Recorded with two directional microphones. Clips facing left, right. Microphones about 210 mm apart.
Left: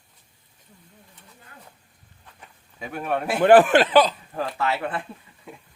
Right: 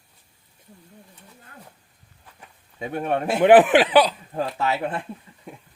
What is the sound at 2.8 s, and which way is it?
A man's voice, 25° right (ahead or behind).